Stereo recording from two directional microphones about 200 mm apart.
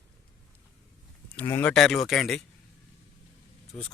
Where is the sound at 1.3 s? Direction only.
10° left (ahead or behind).